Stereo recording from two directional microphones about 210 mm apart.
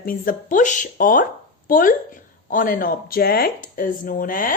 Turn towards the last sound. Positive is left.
turn(degrees=40)  # may be behind; listen again after turning